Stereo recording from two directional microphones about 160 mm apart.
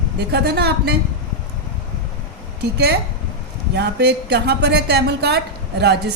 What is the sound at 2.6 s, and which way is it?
A man's voice, 90° right.